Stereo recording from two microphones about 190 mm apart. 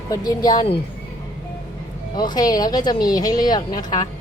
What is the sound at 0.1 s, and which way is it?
Speech, 20° left (ahead or behind).